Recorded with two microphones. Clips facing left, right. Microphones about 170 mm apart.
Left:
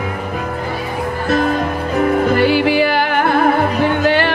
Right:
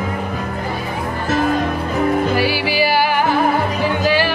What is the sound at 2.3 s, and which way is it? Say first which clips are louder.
Music: left 5 dB; 55° left (ahead or behind).